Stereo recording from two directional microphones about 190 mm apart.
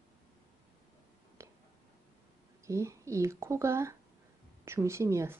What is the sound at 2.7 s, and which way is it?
Speech, 15° right (ahead or behind).